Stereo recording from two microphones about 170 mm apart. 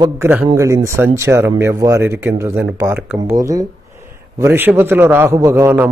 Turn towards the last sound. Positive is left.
turn(degrees=-15)  # may be behind; listen again after turning